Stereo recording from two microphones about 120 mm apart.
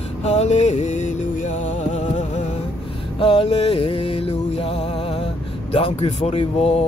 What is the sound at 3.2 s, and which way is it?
Music, 50° left (ahead or behind).